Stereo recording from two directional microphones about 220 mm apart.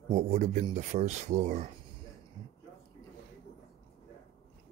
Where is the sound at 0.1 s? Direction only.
35° right (ahead or behind).